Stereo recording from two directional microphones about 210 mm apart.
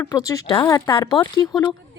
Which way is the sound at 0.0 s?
15° left (ahead or behind).